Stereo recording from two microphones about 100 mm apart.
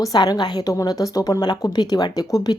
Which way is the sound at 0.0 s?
40° left (ahead or behind).